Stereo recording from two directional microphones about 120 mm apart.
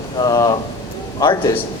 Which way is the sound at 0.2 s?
35° left (ahead or behind).